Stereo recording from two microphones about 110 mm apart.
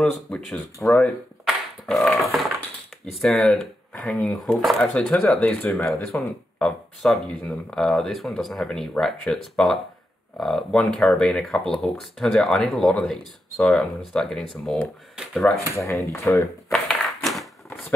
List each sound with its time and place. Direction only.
0.0 s speech: 5° left (ahead or behind)
5.9 s speech: centre (ahead or behind)
15.7 s speech: 25° left (ahead or behind)
16.7 s a sound: centre (ahead or behind)